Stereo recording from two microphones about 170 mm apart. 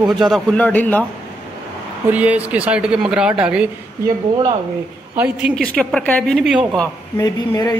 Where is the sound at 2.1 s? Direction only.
10° right (ahead or behind).